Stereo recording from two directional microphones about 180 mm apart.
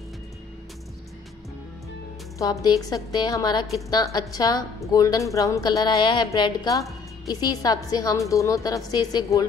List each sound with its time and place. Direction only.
2.3 s a woman's voice: 20° left (ahead or behind)